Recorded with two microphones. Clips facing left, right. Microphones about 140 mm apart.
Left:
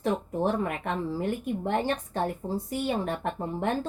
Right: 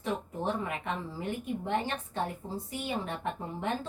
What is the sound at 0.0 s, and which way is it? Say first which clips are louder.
Speech: left 6 dB; 50° left (ahead or behind).